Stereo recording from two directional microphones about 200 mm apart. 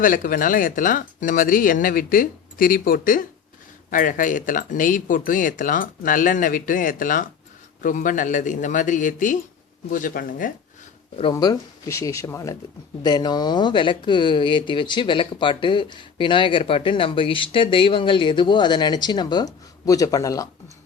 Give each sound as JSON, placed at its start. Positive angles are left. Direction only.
{"t": 0.0, "sound": "speech", "side_deg": 45}
{"t": 11.2, "sound": "speech", "side_deg": 20}